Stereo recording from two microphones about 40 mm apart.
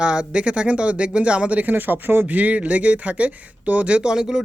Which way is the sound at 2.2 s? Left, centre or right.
Right.